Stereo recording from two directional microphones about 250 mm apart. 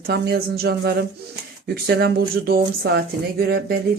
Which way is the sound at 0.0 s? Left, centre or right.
Right.